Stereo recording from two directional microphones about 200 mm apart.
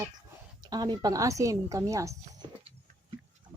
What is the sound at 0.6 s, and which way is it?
Speech, 20° right (ahead or behind).